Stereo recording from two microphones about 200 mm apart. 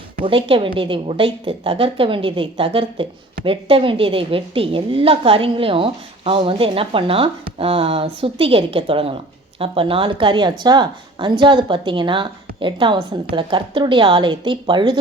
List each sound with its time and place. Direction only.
0.2 s a woman's voice: 25° right (ahead or behind)